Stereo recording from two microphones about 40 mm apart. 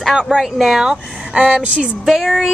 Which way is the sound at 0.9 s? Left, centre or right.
Right.